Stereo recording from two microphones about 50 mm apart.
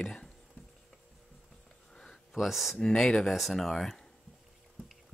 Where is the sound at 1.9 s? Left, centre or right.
Centre.